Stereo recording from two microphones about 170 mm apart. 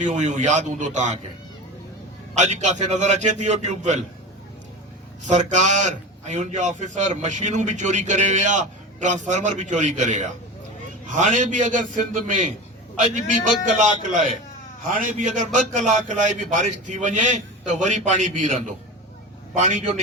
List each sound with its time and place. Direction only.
0.0 s a man's voice: 45° right (ahead or behind)
2.3 s a man's voice: 45° right (ahead or behind)
5.2 s a man's voice: 45° right (ahead or behind)